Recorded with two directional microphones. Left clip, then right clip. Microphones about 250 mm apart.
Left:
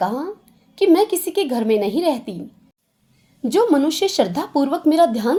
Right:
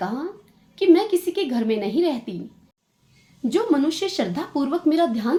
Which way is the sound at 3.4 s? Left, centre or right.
Left.